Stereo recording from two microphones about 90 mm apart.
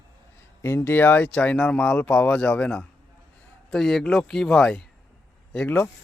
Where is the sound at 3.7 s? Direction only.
5° left (ahead or behind).